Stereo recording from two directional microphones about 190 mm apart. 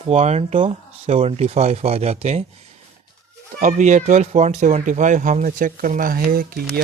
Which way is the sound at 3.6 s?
40° right (ahead or behind).